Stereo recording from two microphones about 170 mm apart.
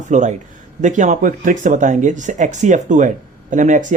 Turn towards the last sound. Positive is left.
turn(degrees=-45)  # may be behind; listen again after turning